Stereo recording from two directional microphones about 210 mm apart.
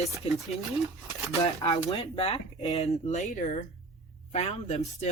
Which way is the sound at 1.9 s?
25° left (ahead or behind).